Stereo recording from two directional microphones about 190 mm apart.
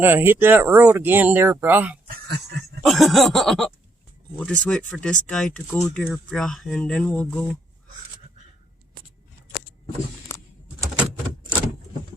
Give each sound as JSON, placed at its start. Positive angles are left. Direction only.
{"t": 0.0, "sound": "speech", "side_deg": -10}
{"t": 2.0, "sound": "speech", "side_deg": -55}
{"t": 2.8, "sound": "speech", "side_deg": 0}